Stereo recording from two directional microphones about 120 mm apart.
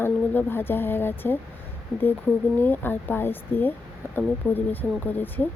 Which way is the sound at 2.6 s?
15° left (ahead or behind).